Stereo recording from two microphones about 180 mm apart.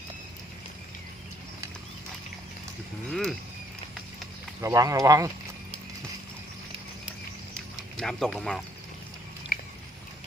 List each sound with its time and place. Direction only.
3.1 s speech: centre (ahead or behind)
4.6 s speech: 20° right (ahead or behind)
7.9 s speech: 5° left (ahead or behind)